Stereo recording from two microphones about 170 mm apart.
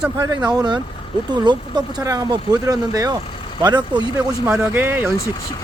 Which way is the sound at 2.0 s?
20° right (ahead or behind).